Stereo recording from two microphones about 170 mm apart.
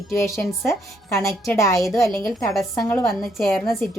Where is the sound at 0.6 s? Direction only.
20° left (ahead or behind).